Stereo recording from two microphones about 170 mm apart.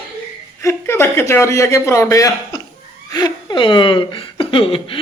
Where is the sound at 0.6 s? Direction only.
15° left (ahead or behind).